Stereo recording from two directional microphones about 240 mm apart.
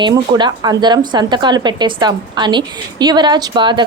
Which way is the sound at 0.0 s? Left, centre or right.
Centre.